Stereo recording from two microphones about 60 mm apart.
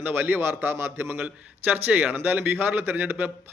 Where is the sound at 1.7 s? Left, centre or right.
Right.